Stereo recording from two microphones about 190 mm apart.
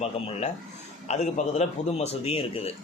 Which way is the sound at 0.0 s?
35° left (ahead or behind).